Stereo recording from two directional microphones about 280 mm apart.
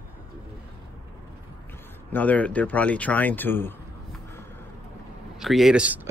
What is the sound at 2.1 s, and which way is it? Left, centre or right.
Speech, centre.